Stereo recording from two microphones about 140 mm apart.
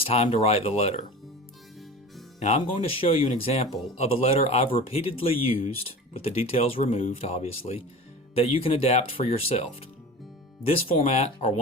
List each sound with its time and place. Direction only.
0.0 s speech: 45° left (ahead or behind)
2.4 s speech: 55° left (ahead or behind)
10.7 s speech: 45° left (ahead or behind)